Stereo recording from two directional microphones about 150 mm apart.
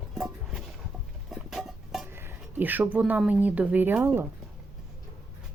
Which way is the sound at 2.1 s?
15° right (ahead or behind).